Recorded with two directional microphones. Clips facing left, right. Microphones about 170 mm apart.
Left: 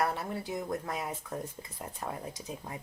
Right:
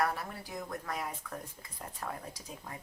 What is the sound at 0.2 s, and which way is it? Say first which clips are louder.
Speech: left 6 dB; 25° left (ahead or behind).